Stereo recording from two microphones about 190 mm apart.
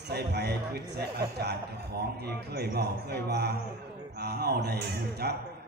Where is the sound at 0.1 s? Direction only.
60° right (ahead or behind).